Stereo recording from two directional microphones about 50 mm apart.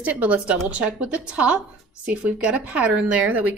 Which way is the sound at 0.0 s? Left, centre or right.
Right.